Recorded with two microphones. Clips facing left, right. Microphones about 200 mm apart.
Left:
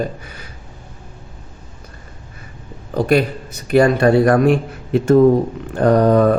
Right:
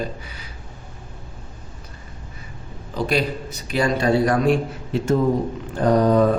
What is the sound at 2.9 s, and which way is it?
A man's voice, 55° left (ahead or behind).